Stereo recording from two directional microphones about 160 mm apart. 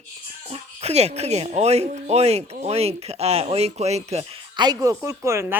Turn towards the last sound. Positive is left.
turn(degrees=-15)  # may be behind; listen again after turning